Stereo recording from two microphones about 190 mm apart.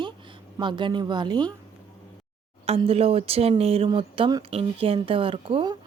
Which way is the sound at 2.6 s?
30° right (ahead or behind).